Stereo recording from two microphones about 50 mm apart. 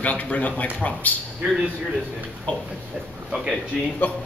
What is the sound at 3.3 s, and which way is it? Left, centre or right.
Speech, centre.